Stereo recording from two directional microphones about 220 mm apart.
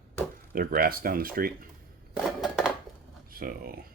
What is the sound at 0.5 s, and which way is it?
Speech, 40° right (ahead or behind).